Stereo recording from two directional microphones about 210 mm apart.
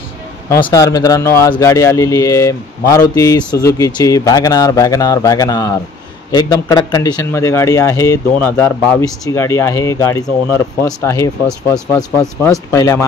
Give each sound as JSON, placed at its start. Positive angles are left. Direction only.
{"t": 0.5, "sound": "speech", "side_deg": 20}